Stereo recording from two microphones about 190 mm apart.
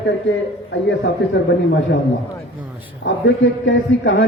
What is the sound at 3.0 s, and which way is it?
A man's voice, 75° left (ahead or behind).